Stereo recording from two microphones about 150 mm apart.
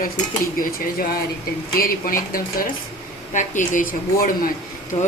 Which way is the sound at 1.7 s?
75° left (ahead or behind).